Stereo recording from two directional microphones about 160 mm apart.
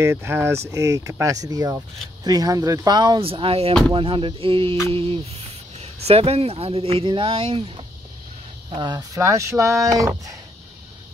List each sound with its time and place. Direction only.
0.0 s speech: 15° right (ahead or behind)